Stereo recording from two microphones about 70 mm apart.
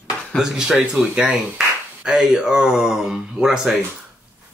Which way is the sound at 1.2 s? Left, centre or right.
Right.